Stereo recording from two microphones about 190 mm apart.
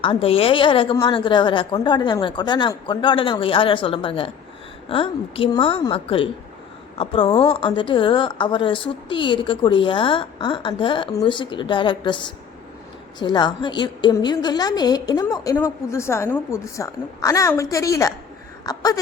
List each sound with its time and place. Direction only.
0.0 s a woman's voice: 30° left (ahead or behind)